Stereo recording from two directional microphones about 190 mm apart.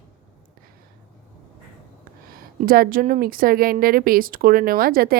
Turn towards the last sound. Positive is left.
turn(degrees=-50)  # may be behind; listen again after turning